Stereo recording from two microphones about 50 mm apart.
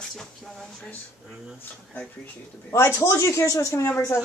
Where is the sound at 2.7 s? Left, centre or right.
Left.